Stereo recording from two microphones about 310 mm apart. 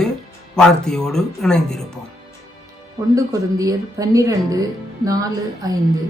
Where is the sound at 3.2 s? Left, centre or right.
Centre.